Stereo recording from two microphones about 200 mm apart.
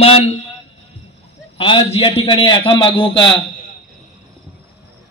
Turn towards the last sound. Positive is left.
turn(degrees=25)  # may be behind; listen again after turning